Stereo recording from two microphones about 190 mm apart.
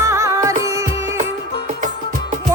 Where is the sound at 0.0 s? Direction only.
15° right (ahead or behind).